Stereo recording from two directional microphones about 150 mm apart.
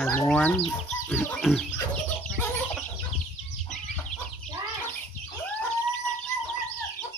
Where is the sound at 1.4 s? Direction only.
Centre (ahead or behind).